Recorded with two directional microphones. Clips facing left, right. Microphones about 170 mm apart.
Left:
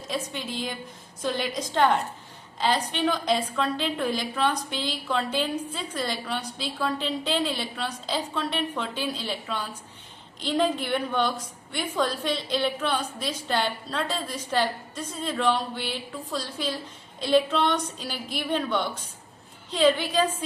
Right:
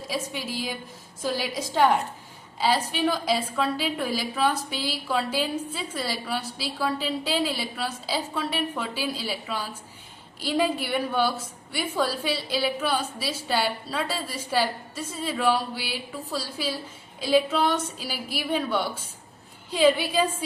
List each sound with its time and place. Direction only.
0.1 s a woman's voice: 5° right (ahead or behind)